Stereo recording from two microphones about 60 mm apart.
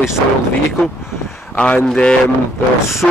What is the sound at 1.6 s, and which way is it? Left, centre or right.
Speech, centre.